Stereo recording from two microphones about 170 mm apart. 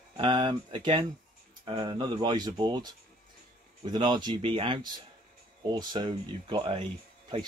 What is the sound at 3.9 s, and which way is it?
Speech, 25° right (ahead or behind).